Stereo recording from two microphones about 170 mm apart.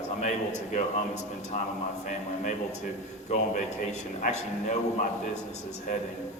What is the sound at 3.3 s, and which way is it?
A man's voice, 45° left (ahead or behind).